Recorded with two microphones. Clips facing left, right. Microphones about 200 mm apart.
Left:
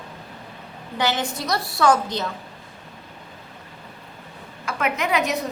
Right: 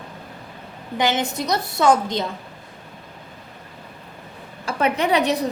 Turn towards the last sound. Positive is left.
turn(degrees=-35)  # may be behind; listen again after turning